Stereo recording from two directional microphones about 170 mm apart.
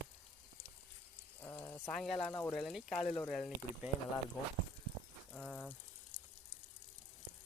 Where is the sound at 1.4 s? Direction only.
15° left (ahead or behind).